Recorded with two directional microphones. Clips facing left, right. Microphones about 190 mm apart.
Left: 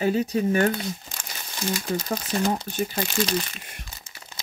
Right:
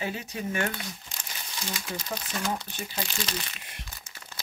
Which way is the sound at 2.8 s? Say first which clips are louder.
Left 9 dB; 50° left (ahead or behind).